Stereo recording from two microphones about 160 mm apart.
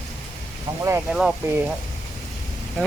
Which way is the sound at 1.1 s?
5° right (ahead or behind).